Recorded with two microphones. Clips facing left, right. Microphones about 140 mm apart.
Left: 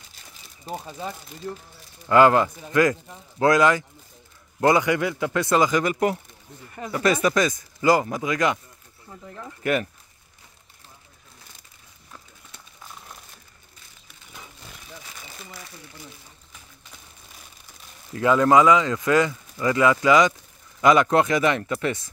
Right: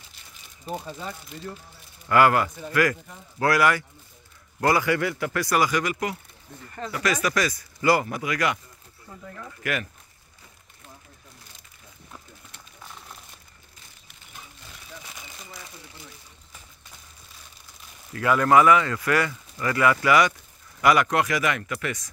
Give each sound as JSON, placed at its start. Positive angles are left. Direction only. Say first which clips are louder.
{"t": 2.0, "sound": "speech", "louder": "left 3 dB", "side_deg": 25}
{"t": 18.1, "sound": "speech", "louder": "left 2 dB", "side_deg": 20}